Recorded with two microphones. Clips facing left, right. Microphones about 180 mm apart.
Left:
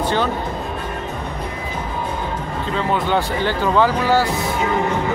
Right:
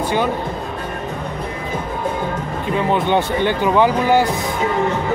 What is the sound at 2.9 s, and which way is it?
Speech, 20° right (ahead or behind).